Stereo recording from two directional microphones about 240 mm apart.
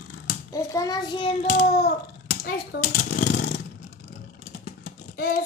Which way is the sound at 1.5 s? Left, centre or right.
Left.